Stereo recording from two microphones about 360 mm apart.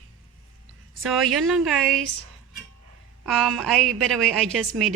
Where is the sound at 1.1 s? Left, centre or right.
Centre.